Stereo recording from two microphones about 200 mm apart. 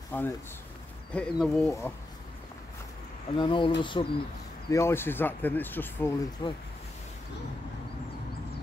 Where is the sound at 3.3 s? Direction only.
25° left (ahead or behind).